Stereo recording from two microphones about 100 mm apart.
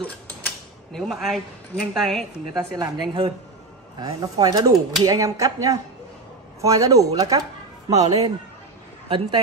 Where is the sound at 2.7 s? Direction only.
40° right (ahead or behind).